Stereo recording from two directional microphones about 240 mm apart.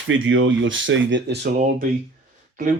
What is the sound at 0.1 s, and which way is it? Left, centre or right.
Speech, right.